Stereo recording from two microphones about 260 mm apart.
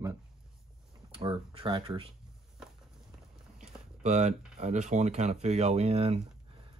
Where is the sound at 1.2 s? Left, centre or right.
Right.